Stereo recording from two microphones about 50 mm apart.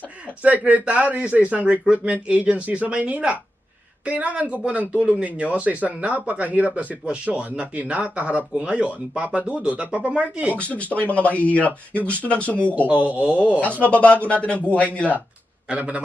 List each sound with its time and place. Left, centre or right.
0.4 s speech: right
10.6 s speech: left
12.9 s speech: right
13.8 s speech: left
15.7 s speech: right